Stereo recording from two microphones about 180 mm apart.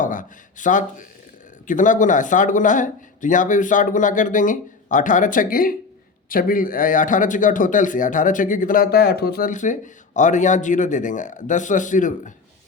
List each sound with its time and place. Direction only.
0.0 s a man's voice: 45° left (ahead or behind)